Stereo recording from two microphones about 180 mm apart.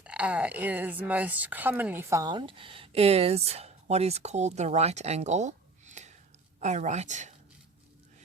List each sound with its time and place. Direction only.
0.0 s speech: 5° right (ahead or behind); by 7.3 s 40° right (ahead or behind)